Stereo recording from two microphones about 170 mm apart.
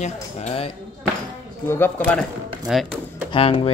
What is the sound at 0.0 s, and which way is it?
Speech, 40° left (ahead or behind).